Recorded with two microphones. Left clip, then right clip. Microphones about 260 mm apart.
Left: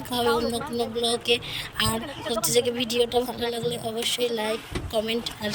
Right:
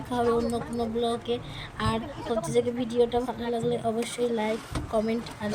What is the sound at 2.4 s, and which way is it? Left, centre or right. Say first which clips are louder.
A woman's voice: left 4 dB; left.